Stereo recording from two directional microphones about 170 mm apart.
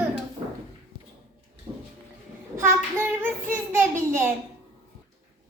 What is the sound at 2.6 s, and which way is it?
A child's voice, 15° right (ahead or behind).